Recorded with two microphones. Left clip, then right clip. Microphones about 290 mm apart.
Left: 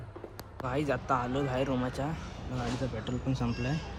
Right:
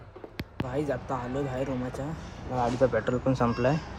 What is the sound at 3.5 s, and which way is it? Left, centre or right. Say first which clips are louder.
Speech: right 10 dB; centre.